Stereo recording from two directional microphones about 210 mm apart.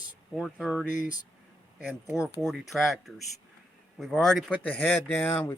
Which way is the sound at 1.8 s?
5° right (ahead or behind).